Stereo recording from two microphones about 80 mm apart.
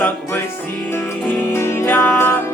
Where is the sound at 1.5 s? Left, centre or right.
Left.